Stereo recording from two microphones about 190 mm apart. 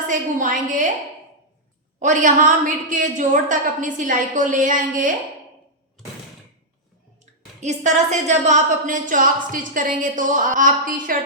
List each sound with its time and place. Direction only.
0.1 s a woman's voice: 45° right (ahead or behind)
2.0 s a woman's voice: 40° right (ahead or behind)
7.6 s a woman's voice: 40° right (ahead or behind)